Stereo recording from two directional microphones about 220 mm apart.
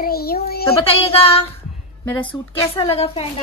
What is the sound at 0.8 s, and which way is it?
Child singing, 25° left (ahead or behind).